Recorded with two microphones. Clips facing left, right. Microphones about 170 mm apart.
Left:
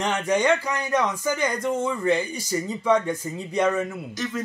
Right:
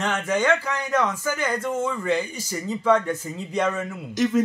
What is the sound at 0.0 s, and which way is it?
Speech, 15° left (ahead or behind).